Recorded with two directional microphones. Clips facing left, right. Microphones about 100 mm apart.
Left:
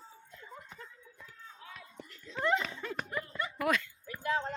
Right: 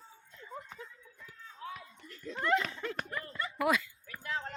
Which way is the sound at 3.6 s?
5° right (ahead or behind).